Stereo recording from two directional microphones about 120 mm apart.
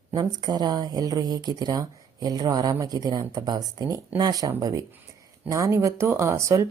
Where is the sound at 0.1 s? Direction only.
35° right (ahead or behind).